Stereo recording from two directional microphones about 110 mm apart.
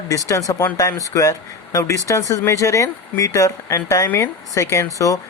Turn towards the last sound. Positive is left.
turn(degrees=30)  # may be behind; listen again after turning